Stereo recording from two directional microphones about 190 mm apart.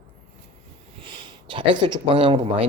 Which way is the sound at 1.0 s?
25° right (ahead or behind).